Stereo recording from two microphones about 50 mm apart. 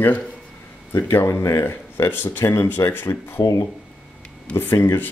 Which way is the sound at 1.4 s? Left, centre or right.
Left.